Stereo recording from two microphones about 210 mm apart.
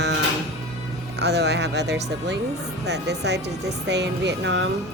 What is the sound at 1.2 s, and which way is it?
Speech, 55° right (ahead or behind).